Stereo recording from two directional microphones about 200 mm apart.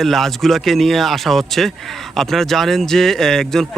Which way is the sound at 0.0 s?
Centre (ahead or behind).